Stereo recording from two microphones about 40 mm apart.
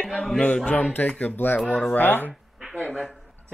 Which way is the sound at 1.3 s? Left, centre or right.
Left.